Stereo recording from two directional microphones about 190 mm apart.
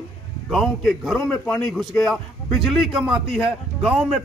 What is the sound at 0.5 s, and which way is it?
A man's voice, centre (ahead or behind).